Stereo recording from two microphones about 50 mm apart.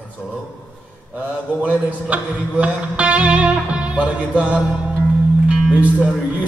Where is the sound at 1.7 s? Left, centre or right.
Right.